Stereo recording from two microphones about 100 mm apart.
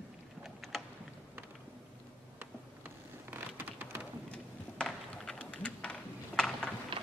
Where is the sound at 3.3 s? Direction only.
15° right (ahead or behind).